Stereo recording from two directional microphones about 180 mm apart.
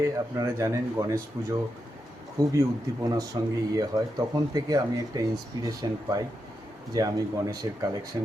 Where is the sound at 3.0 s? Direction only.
20° right (ahead or behind).